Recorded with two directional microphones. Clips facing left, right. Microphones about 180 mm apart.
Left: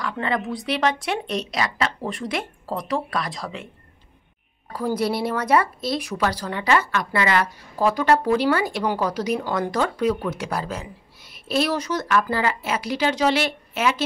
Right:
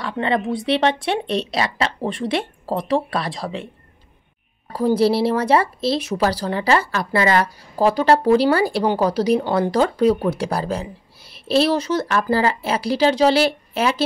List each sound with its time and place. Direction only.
0.0 s speech: 25° right (ahead or behind)
4.7 s speech: 30° right (ahead or behind)